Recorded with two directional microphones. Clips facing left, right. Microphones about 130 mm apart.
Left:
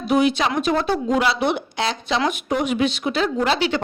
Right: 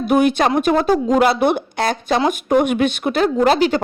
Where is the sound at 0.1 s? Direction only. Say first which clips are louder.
Right 3 dB; 50° right (ahead or behind).